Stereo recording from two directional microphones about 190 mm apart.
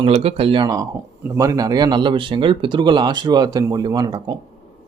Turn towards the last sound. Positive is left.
turn(degrees=-20)  # may be behind; listen again after turning